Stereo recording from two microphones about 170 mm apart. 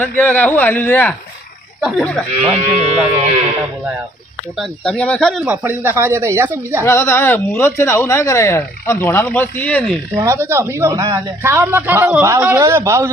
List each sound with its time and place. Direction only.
0.2 s speech: 10° left (ahead or behind)
2.5 s speech: 40° right (ahead or behind)
4.5 s speech: centre (ahead or behind)
5.5 s speech: 10° right (ahead or behind)
6.8 s speech: 15° left (ahead or behind)
10.2 s speech: 15° right (ahead or behind)